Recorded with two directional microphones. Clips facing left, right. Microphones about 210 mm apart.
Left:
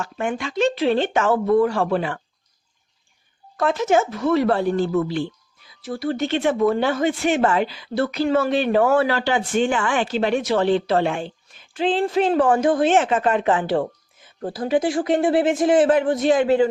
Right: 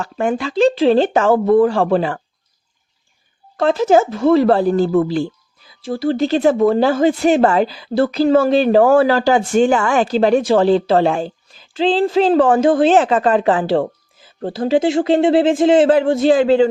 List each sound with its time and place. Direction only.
0.0 s speech: 35° right (ahead or behind)
3.6 s speech: 30° right (ahead or behind)